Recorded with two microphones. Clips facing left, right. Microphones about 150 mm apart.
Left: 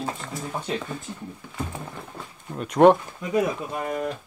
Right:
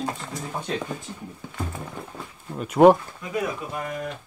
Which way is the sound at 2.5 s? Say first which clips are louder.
Right 1 dB; 5° right (ahead or behind).